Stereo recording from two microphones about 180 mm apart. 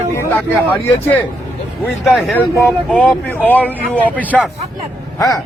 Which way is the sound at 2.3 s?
10° left (ahead or behind).